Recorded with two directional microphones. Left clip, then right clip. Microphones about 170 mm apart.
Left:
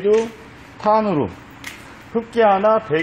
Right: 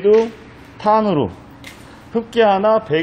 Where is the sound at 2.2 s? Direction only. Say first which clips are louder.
Right 1 dB; 15° right (ahead or behind).